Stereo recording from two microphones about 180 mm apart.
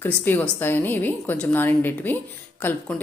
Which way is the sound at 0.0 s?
10° left (ahead or behind).